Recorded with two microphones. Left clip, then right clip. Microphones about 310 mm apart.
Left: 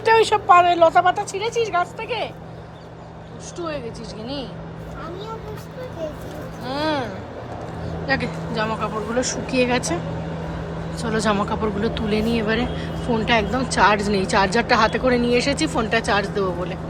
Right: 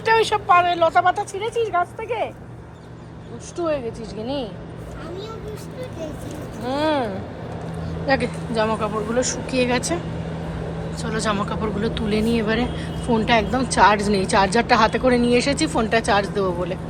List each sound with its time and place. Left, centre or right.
0.0 s speech: centre
3.6 s speech: centre
6.7 s speech: centre